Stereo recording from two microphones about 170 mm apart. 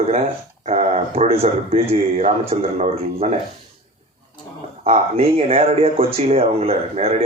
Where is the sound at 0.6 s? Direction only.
40° right (ahead or behind).